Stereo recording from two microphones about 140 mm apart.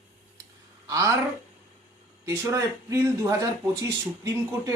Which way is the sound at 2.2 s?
20° right (ahead or behind).